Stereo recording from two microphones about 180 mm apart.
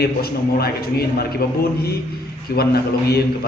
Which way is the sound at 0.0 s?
60° left (ahead or behind).